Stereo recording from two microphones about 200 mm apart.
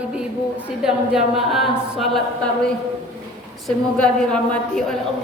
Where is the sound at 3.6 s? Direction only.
5° left (ahead or behind).